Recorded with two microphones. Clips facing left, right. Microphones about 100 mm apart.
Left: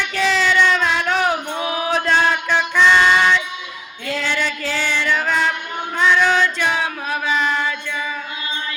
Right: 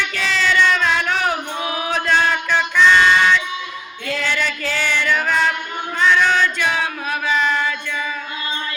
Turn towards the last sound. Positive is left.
turn(degrees=15)  # may be behind; listen again after turning